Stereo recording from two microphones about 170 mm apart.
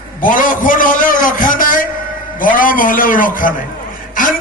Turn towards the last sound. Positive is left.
turn(degrees=55)  # may be behind; listen again after turning